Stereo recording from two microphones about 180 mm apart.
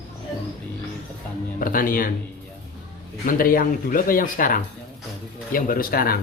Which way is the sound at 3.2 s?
50° left (ahead or behind).